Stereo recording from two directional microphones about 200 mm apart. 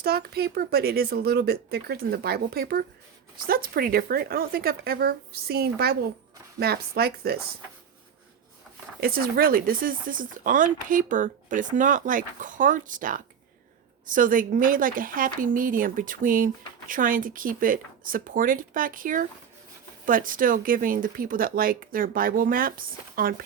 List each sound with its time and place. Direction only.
0.0 s speech: 50° right (ahead or behind)
9.0 s speech: 50° right (ahead or behind)